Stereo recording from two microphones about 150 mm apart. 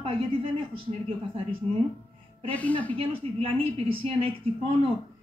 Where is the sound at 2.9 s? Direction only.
40° right (ahead or behind).